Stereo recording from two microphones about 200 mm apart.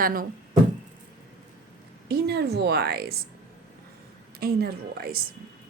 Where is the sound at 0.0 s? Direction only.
45° right (ahead or behind).